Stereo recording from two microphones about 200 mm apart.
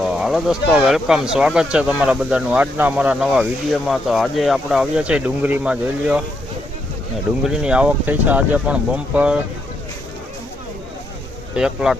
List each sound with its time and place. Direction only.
0.0 s speech: centre (ahead or behind)
7.4 s speech: 5° right (ahead or behind)
11.5 s speech: 5° right (ahead or behind)